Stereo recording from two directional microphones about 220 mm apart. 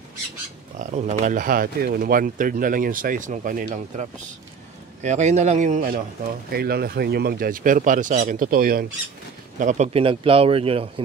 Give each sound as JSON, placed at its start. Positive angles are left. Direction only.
{"t": 0.7, "sound": "speech", "side_deg": -30}